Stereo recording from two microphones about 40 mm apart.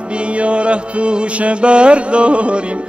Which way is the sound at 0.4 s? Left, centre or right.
Right.